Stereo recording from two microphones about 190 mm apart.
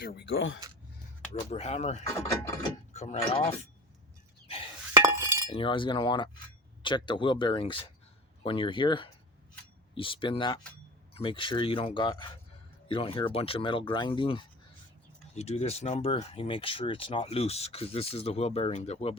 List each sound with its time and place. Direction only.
0.0 s speech: 55° left (ahead or behind); by 0.6 s 75° left (ahead or behind)
1.5 s speech: 35° left (ahead or behind)
2.9 s a sound: 35° left (ahead or behind)
3.2 s speech: 25° left (ahead or behind)
4.4 s chink: 30° left (ahead or behind)
5.0 s chink: 15° right (ahead or behind)
5.5 s speech: 25° left (ahead or behind)